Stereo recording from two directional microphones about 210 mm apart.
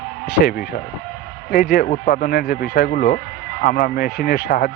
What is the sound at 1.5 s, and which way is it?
Speech, 45° left (ahead or behind).